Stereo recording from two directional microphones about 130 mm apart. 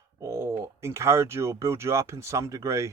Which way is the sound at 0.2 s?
25° right (ahead or behind).